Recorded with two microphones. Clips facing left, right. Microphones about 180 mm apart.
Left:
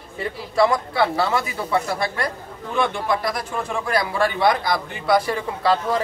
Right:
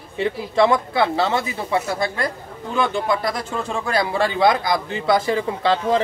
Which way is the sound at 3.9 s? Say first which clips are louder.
Right 1 dB; 25° right (ahead or behind).